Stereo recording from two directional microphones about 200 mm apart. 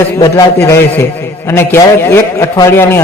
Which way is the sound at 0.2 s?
15° left (ahead or behind).